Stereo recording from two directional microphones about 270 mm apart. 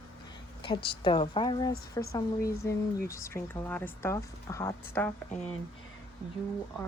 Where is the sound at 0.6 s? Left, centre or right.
Centre.